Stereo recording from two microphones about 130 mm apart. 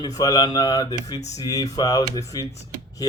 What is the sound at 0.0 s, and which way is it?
A man's voice, 30° left (ahead or behind).